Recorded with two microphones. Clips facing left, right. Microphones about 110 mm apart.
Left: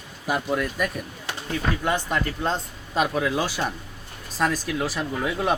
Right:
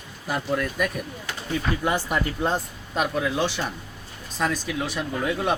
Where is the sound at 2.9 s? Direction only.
Centre (ahead or behind).